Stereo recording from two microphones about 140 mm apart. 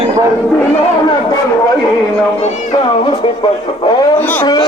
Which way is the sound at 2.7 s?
35° left (ahead or behind).